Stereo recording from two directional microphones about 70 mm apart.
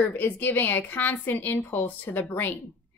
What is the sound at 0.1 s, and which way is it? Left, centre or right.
A woman's voice, left.